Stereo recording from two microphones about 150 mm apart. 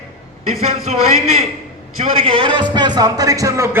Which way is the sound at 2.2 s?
35° right (ahead or behind).